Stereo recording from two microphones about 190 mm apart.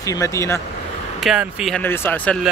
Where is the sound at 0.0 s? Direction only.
15° left (ahead or behind).